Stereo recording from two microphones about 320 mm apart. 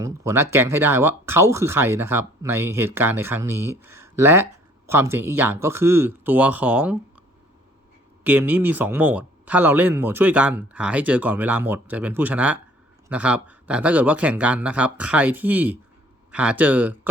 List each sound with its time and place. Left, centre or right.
0.0 s speech: centre
8.2 s speech: centre